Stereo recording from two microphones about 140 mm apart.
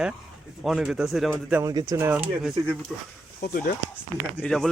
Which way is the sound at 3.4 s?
90° left.